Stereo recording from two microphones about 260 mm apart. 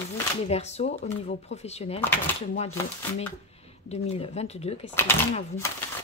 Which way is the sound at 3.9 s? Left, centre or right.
Left.